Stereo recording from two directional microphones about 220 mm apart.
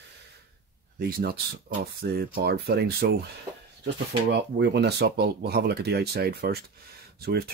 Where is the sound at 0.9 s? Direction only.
45° right (ahead or behind).